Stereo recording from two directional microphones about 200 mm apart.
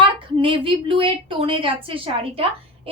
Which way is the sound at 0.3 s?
25° right (ahead or behind).